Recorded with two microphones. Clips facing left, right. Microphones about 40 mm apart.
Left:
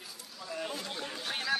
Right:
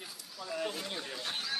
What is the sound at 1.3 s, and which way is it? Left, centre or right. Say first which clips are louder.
Speech: left 7 dB; left.